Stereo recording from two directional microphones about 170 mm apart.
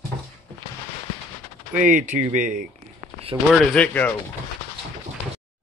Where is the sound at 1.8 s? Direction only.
50° right (ahead or behind).